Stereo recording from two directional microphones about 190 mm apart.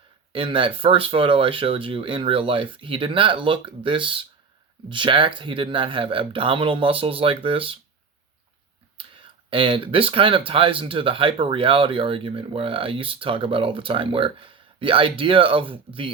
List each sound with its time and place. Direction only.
0.3 s speech: 30° right (ahead or behind)
9.0 s speech: 25° right (ahead or behind)